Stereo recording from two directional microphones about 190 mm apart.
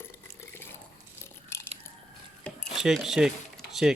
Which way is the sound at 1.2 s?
15° left (ahead or behind).